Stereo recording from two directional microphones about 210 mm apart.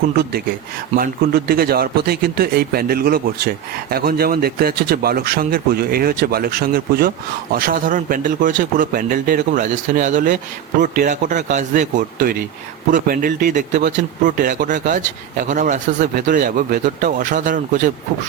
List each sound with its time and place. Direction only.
0.9 s speech: 45° right (ahead or behind)